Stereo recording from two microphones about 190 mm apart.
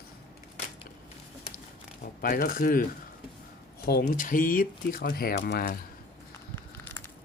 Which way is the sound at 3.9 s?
50° left (ahead or behind).